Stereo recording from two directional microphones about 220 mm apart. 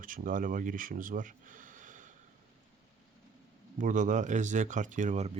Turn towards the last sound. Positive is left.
turn(degrees=-35)  # may be behind; listen again after turning